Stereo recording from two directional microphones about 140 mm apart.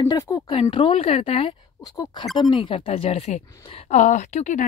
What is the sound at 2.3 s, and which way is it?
Speech, centre (ahead or behind).